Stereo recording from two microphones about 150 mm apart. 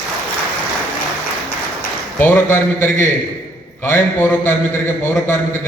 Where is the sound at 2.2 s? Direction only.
15° left (ahead or behind).